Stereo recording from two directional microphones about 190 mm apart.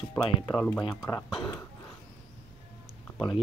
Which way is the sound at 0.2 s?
20° left (ahead or behind).